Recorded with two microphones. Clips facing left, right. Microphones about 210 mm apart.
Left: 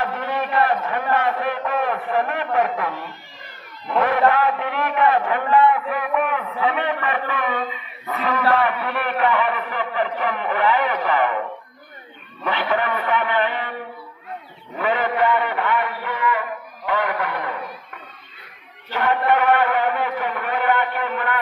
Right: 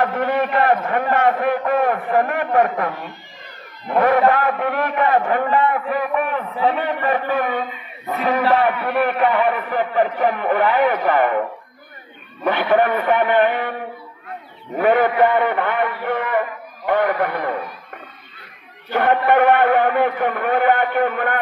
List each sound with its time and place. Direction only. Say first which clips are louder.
0.0 s a man's voice: right 6 dB; 50° right (ahead or behind)
3.9 s a man's voice: right 3 dB; 50° right (ahead or behind)
12.4 s a man's voice: right 6 dB; 50° right (ahead or behind)
14.8 s a man's voice: right 6 dB; 50° right (ahead or behind)
18.9 s a man's voice: right 3 dB; 55° right (ahead or behind)